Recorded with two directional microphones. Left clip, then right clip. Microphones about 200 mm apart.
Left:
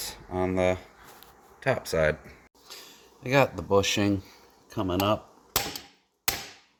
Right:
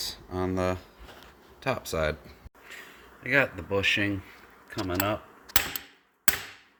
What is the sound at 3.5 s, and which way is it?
Speech, 35° left (ahead or behind).